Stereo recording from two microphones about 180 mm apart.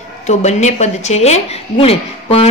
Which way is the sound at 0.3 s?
40° left (ahead or behind).